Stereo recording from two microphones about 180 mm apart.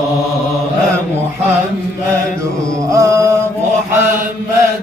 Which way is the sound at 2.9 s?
15° right (ahead or behind).